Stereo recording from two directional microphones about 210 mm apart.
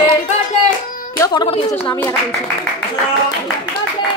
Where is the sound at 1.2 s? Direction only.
20° left (ahead or behind).